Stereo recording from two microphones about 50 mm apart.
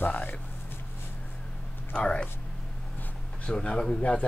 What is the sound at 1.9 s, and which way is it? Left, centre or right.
Speech, left.